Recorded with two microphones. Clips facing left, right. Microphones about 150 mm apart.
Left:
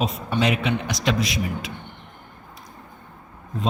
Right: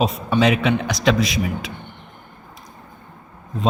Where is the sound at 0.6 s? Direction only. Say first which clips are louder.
Right 5 dB; 90° right.